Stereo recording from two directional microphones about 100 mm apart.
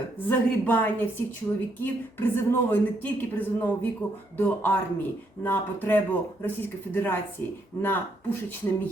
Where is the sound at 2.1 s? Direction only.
20° left (ahead or behind).